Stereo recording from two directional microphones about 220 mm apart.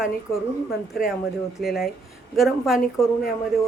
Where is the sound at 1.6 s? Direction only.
Centre (ahead or behind).